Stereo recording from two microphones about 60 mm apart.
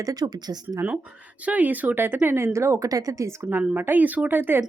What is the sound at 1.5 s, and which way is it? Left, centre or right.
Speech, right.